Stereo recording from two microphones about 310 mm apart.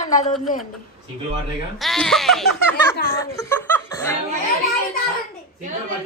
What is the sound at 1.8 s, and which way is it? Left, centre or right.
Music, centre.